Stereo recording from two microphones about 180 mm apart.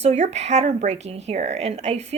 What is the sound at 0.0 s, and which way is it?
Speech, 35° right (ahead or behind).